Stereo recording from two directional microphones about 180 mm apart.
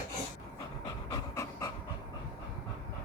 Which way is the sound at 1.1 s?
20° left (ahead or behind).